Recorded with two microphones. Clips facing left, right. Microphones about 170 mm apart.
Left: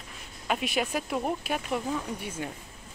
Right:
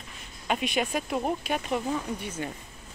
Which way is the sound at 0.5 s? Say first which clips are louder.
Right 1 dB; centre (ahead or behind).